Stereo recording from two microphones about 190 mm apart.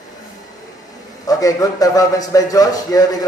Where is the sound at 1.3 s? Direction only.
20° left (ahead or behind).